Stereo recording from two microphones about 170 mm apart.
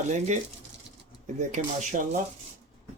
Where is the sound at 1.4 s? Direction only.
45° right (ahead or behind).